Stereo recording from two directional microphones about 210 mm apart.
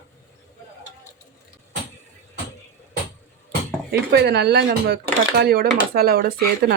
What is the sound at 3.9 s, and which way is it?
Speech, 50° right (ahead or behind).